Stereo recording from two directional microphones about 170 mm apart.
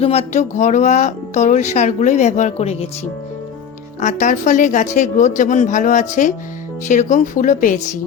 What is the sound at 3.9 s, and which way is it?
Speech, 45° left (ahead or behind).